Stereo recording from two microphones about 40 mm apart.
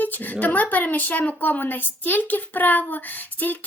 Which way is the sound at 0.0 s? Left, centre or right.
Left.